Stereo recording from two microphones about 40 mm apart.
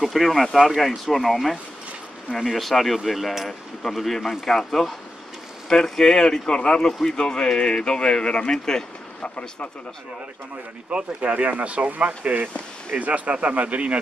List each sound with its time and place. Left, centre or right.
0.0 s speech: centre
10.9 s speech: right